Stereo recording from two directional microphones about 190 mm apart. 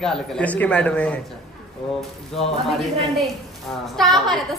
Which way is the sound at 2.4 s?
Centre (ahead or behind).